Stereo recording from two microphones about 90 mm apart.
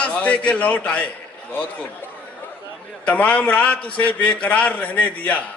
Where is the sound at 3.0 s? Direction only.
15° left (ahead or behind).